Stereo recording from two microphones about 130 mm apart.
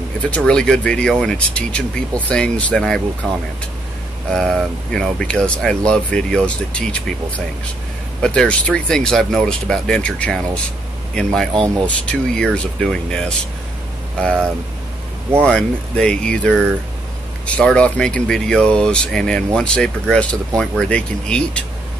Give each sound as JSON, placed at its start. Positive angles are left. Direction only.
{"t": 0.3, "sound": "speech", "side_deg": 5}
{"t": 4.3, "sound": "speech", "side_deg": 5}
{"t": 11.6, "sound": "speech", "side_deg": -25}
{"t": 12.1, "sound": "speech", "side_deg": 5}
{"t": 15.4, "sound": "speech", "side_deg": 5}